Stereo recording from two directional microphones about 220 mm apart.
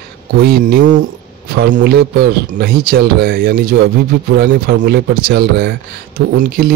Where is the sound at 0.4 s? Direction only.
45° right (ahead or behind).